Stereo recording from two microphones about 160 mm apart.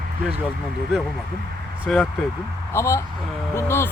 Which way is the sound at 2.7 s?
15° left (ahead or behind).